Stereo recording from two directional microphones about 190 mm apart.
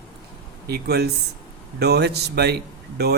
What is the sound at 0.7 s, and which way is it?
Speech, 60° right (ahead or behind).